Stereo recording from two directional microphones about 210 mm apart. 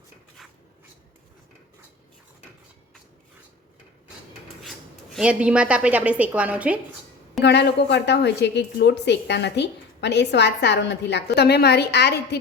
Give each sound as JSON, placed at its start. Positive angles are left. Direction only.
{"t": 5.1, "sound": "a woman's voice", "side_deg": -5}
{"t": 7.4, "sound": "a woman's voice", "side_deg": 55}